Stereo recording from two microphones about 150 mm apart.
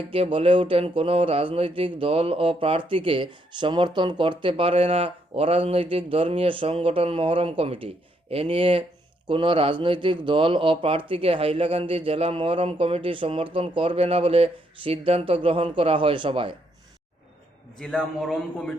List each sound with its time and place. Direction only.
0.1 s speech: 40° right (ahead or behind)
17.7 s a man's voice: 5° left (ahead or behind)